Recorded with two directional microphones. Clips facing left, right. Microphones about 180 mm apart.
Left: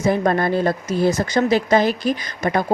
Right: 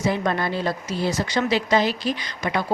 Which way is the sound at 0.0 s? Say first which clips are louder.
Left 5 dB; 50° left (ahead or behind).